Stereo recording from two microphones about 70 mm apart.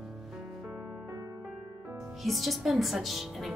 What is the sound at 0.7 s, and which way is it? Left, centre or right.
Music, right.